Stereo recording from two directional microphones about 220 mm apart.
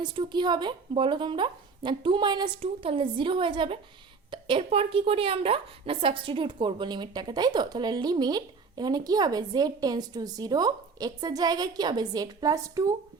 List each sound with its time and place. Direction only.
0.0 s a woman's voice: 20° right (ahead or behind)